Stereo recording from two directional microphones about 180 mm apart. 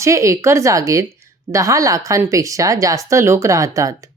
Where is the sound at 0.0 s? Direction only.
15° right (ahead or behind).